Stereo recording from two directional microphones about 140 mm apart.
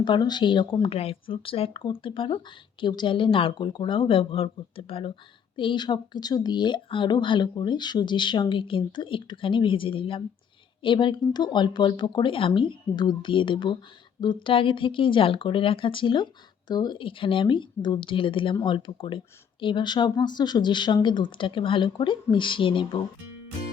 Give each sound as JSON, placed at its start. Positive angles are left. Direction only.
{"t": 0.0, "sound": "a woman's voice", "side_deg": 30}